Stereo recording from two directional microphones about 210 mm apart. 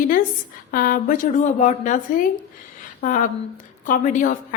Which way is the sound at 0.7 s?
40° left (ahead or behind).